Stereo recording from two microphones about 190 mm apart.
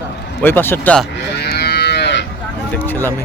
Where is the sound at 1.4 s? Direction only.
60° left (ahead or behind).